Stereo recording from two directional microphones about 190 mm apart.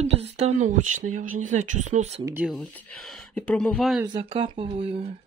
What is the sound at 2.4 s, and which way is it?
Speech, centre (ahead or behind).